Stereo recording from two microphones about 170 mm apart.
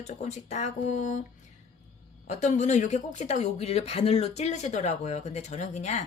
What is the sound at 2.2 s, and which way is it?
Speech, 45° left (ahead or behind).